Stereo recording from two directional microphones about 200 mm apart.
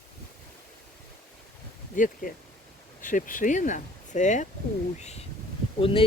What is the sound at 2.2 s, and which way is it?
Speech, 45° left (ahead or behind).